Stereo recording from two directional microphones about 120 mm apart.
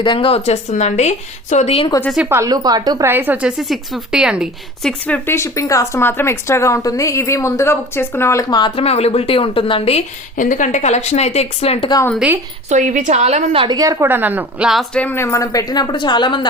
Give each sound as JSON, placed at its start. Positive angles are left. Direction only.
{"t": 0.0, "sound": "speech", "side_deg": 45}
{"t": 1.9, "sound": "speech", "side_deg": 30}
{"t": 2.3, "sound": "a woman's voice", "side_deg": -30}
{"t": 3.1, "sound": "a woman's voice", "side_deg": -15}
{"t": 3.6, "sound": "speech", "side_deg": 0}
{"t": 4.8, "sound": "speech", "side_deg": 10}
{"t": 8.4, "sound": "speech", "side_deg": 40}
{"t": 8.8, "sound": "a woman's voice", "side_deg": 60}
{"t": 10.3, "sound": "a woman's voice", "side_deg": 90}
{"t": 12.7, "sound": "a woman's voice", "side_deg": -90}
{"t": 13.6, "sound": "a woman's voice", "side_deg": -30}
{"t": 14.1, "sound": "a woman's voice", "side_deg": -15}
{"t": 14.9, "sound": "speech", "side_deg": 15}